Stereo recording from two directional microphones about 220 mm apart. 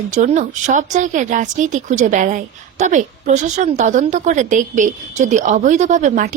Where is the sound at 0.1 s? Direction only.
35° right (ahead or behind).